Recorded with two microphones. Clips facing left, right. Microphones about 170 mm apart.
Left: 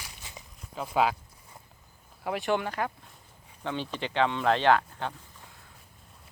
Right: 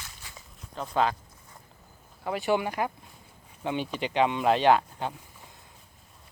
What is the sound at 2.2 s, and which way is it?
Speech, centre (ahead or behind).